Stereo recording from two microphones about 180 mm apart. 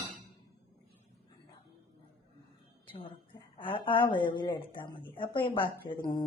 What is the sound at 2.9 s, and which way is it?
Speech, 30° left (ahead or behind).